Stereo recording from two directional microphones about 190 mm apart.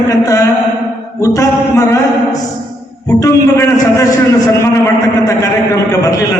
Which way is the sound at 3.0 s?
15° left (ahead or behind).